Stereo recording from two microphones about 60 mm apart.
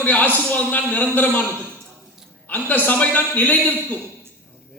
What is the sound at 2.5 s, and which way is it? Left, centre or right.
A man's voice, left.